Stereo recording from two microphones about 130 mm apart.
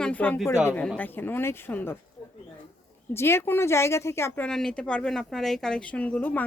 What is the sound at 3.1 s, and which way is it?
Speech, 20° left (ahead or behind).